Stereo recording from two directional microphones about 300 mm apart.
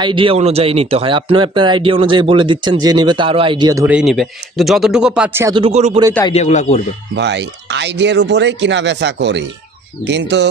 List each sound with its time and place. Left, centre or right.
0.0 s speech: centre
6.3 s speech: left
7.2 s speech: right